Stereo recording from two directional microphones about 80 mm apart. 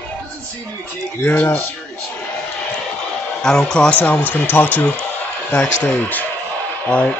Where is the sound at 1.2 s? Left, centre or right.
Left.